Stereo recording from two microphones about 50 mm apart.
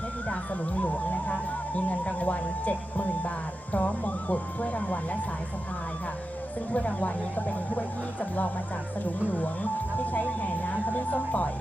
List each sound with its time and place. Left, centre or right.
0.3 s speech: left
6.7 s speech: left
10.0 s speech: left